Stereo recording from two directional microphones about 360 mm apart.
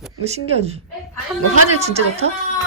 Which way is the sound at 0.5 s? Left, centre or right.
Centre.